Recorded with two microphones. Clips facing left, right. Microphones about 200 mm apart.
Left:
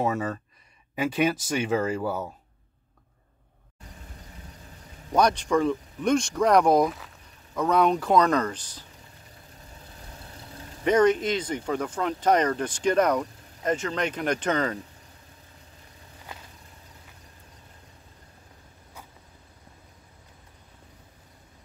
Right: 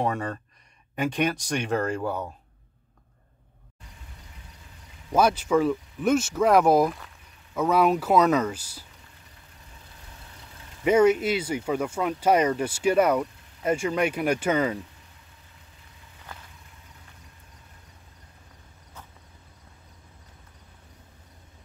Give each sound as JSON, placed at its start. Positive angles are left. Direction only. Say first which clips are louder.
{"t": 0.0, "sound": "speech", "louder": "left 1 dB", "side_deg": 5}
{"t": 5.1, "sound": "speech", "louder": "right 1 dB", "side_deg": -5}
{"t": 10.2, "sound": "vehicle", "louder": "left 5 dB", "side_deg": 35}
{"t": 10.8, "sound": "speech", "louder": "right 1 dB", "side_deg": -10}